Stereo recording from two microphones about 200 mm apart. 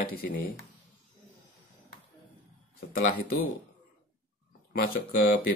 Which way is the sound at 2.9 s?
45° left (ahead or behind).